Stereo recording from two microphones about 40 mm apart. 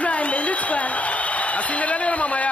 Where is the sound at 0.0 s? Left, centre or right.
Left.